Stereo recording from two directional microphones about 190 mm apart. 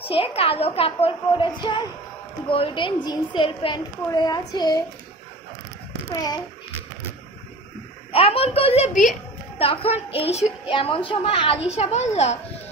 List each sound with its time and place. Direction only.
0.0 s a woman's voice: 30° left (ahead or behind)
8.1 s a woman's voice: 30° left (ahead or behind)